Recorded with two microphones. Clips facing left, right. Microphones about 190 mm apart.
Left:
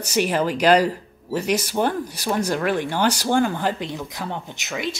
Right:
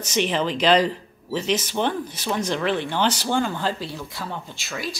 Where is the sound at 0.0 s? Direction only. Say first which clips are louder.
Left 2 dB; 10° left (ahead or behind).